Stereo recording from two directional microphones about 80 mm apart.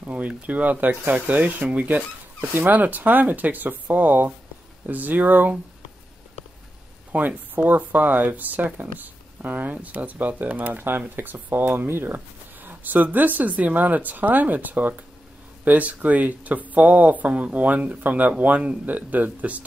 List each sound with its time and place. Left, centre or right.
0.0 s speech: centre
7.1 s speech: right